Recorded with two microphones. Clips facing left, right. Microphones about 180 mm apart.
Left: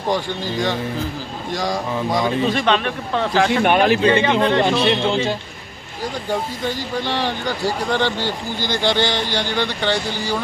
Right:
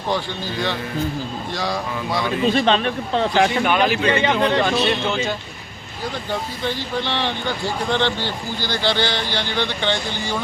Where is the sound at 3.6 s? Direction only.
50° left (ahead or behind).